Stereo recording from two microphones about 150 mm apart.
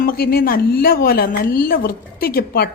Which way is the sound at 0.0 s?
85° left.